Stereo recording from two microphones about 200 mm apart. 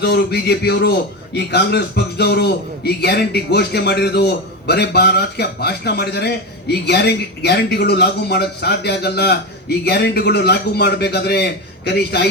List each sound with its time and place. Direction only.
0.0 s a man's voice: 55° left (ahead or behind)